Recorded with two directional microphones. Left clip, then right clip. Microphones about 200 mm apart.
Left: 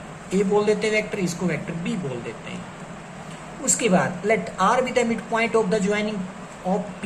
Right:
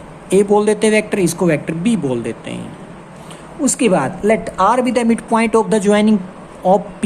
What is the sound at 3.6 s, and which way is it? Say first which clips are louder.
Speech: right 6 dB; 55° right (ahead or behind).